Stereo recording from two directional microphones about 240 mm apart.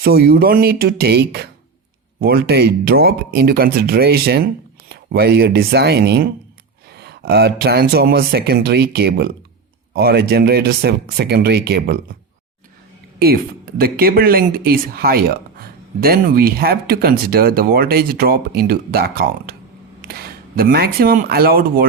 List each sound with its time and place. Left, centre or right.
0.0 s speech: right
13.1 s speech: right